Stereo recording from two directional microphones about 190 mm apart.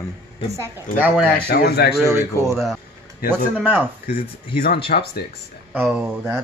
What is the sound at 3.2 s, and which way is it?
Speech, 50° left (ahead or behind).